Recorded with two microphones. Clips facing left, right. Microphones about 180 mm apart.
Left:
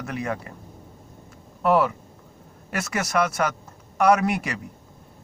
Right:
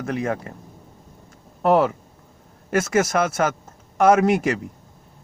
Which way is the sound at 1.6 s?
40° right (ahead or behind).